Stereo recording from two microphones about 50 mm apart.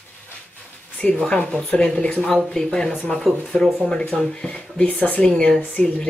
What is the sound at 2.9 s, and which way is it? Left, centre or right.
Speech, left.